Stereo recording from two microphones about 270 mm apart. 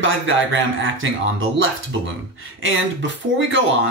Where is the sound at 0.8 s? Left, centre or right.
Right.